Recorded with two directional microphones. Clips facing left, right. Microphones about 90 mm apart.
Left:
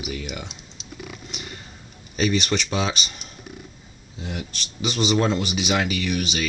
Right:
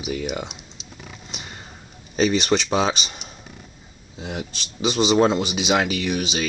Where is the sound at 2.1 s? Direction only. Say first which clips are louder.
Right 3 dB; 30° right (ahead or behind).